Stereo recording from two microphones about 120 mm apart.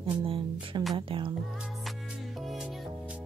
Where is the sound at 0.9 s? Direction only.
45° right (ahead or behind).